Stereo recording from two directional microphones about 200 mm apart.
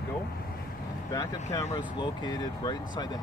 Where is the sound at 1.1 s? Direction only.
15° left (ahead or behind).